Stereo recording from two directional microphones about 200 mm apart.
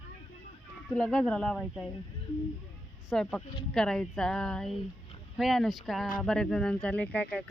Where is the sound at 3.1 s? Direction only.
5° left (ahead or behind).